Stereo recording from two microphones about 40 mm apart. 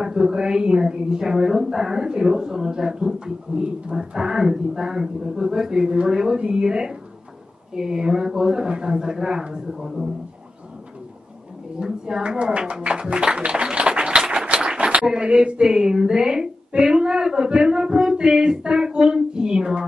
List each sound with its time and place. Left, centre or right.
0.0 s speech: centre
11.8 s speech: right
13.7 s a sound: right
15.0 s speech: centre
15.6 s speech: centre